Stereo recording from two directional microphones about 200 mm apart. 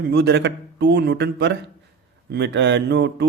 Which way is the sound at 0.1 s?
55° right (ahead or behind).